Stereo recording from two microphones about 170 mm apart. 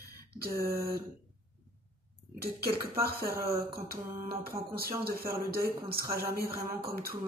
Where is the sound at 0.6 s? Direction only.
60° right (ahead or behind).